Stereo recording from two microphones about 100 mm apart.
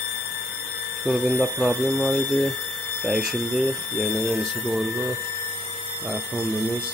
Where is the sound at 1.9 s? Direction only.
15° left (ahead or behind).